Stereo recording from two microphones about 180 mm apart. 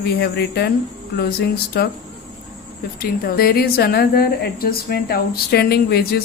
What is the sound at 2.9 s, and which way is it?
A woman's voice, 55° left (ahead or behind).